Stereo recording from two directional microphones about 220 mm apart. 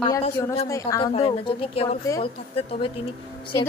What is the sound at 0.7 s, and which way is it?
Speech, 15° left (ahead or behind).